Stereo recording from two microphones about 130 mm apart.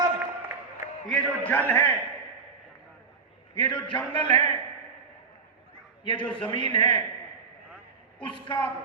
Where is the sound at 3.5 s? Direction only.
40° left (ahead or behind).